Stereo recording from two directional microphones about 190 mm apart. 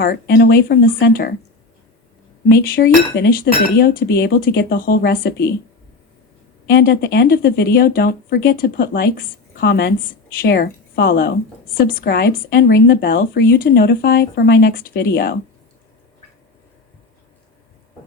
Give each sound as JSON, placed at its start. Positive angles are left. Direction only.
{"t": 0.0, "sound": "speech", "side_deg": 55}
{"t": 2.5, "sound": "speech", "side_deg": 55}
{"t": 6.7, "sound": "speech", "side_deg": 55}